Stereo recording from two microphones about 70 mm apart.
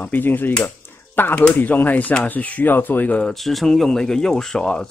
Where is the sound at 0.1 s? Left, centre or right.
Left.